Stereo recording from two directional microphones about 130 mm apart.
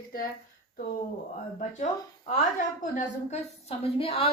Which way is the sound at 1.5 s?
75° left (ahead or behind).